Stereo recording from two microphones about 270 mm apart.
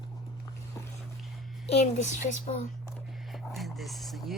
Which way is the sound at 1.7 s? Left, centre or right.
Left.